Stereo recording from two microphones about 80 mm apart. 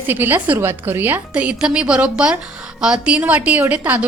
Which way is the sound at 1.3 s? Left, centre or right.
Centre.